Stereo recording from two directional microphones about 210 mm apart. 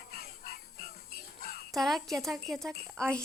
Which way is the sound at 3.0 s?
15° right (ahead or behind).